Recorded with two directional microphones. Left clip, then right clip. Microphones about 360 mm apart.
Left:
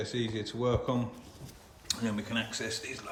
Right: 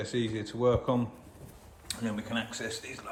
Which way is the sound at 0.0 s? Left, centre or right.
Centre.